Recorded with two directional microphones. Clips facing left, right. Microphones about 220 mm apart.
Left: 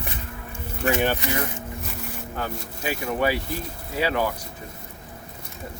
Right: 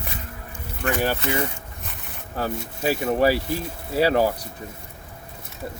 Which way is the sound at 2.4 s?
40° right (ahead or behind).